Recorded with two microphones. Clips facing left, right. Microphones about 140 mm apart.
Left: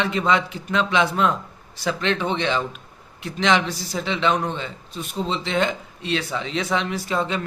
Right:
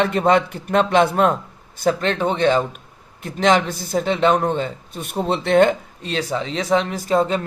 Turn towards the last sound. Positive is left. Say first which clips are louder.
# right 6 dB
turn(degrees=-45)  # may be behind; listen again after turning